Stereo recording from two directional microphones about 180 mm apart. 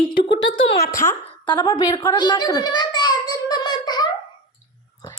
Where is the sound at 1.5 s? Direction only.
20° left (ahead or behind).